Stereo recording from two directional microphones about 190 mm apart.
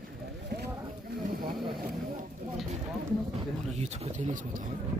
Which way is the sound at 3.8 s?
35° right (ahead or behind).